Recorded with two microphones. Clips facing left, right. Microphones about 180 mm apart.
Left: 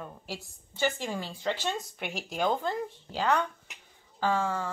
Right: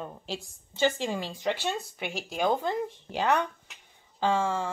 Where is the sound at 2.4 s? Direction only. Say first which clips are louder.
Right 2 dB; 15° right (ahead or behind).